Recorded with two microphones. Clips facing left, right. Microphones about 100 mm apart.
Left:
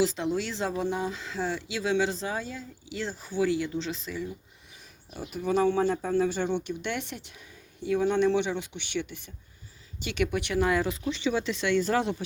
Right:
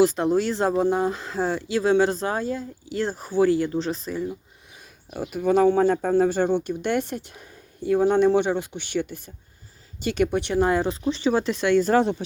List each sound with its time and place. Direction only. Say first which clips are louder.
0.0 s speech: right 8 dB; 50° right (ahead or behind)
5.3 s speech: right 6 dB; 55° right (ahead or behind)